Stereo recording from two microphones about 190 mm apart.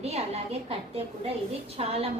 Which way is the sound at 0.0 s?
35° right (ahead or behind).